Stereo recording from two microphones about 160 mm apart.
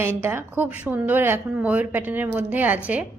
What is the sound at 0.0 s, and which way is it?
A woman's voice, 15° right (ahead or behind).